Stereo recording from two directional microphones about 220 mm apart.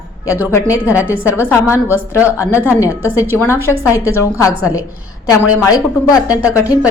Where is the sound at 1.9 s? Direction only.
5° right (ahead or behind).